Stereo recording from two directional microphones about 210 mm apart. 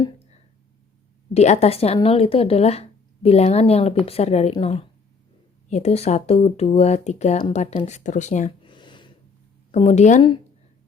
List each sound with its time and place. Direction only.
1.3 s speech: 30° left (ahead or behind)
8.6 s a sound: 20° left (ahead or behind)
9.7 s speech: 30° left (ahead or behind)